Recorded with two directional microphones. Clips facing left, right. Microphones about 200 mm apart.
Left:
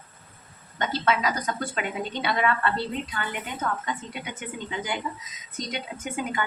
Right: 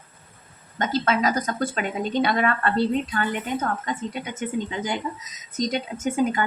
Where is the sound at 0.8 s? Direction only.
45° right (ahead or behind).